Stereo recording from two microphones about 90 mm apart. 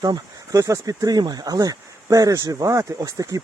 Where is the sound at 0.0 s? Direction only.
40° right (ahead or behind).